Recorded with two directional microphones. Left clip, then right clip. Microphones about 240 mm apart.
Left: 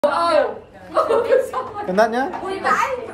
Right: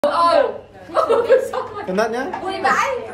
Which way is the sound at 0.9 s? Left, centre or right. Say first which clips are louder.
Right 1 dB; centre.